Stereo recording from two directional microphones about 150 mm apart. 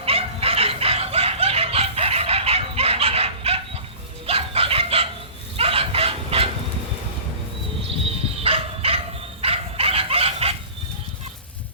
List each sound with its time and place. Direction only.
0.0 s dog: 40° right (ahead or behind)
4.3 s chicken: 40° right (ahead or behind)
5.5 s a sound: 40° right (ahead or behind)
7.9 s dog: 40° right (ahead or behind)
9.4 s chicken: 40° right (ahead or behind)